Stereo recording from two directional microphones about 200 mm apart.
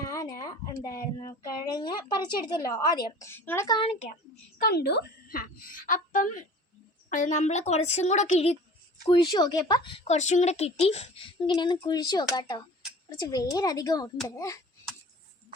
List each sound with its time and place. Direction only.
0.0 s speech: 15° left (ahead or behind)
3.8 s a woman's voice: 30° left (ahead or behind)
4.5 s a woman's voice: 50° left (ahead or behind); by 8.5 s 35° left (ahead or behind)
9.0 s speech: 20° left (ahead or behind)